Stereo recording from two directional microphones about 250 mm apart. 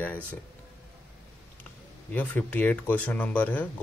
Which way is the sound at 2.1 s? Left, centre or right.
Centre.